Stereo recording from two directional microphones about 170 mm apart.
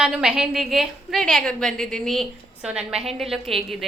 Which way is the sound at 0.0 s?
5° right (ahead or behind).